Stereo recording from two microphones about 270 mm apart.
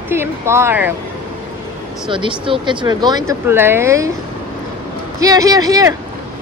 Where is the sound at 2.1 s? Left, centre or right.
Centre.